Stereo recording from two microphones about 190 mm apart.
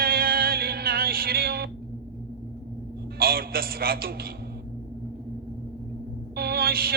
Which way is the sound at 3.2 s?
50° right (ahead or behind).